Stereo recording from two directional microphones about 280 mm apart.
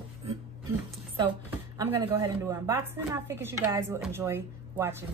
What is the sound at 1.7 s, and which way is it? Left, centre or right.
A woman's voice, centre.